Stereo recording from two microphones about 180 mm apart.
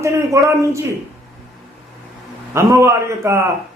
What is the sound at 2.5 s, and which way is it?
Speech, 15° right (ahead or behind).